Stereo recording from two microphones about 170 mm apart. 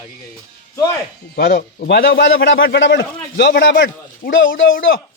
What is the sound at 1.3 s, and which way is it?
A man's voice, 65° left (ahead or behind).